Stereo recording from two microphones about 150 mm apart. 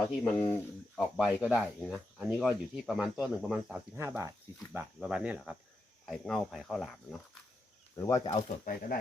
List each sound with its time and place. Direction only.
0.3 s speech: 10° left (ahead or behind); by 3.8 s 5° right (ahead or behind)
3.9 s speech: 15° right (ahead or behind)
4.9 s speech: 5° right (ahead or behind)
6.1 s speech: 5° left (ahead or behind)
7.9 s speech: 20° left (ahead or behind)
8.3 s speech: 50° left (ahead or behind)
8.7 s speech: 70° left (ahead or behind)